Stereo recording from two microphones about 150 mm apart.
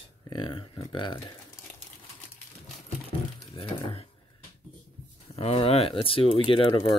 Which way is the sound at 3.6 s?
40° left (ahead or behind).